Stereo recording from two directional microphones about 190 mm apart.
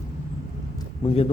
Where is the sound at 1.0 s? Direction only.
30° left (ahead or behind).